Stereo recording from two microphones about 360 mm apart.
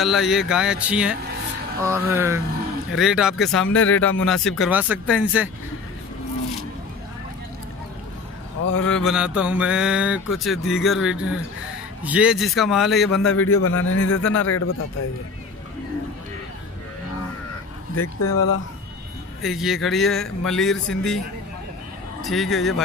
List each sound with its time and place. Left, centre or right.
0.0 s speech: centre
3.7 s speech: left
4.2 s speech: centre
8.8 s speech: centre
13.4 s speech: left
17.9 s speech: left
19.4 s speech: centre
22.2 s speech: centre